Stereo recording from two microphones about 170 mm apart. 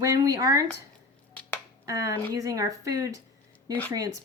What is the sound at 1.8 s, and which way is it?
Speech, 20° right (ahead or behind).